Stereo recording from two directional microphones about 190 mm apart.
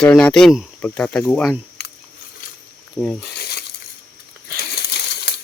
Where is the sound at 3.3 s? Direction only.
55° left (ahead or behind).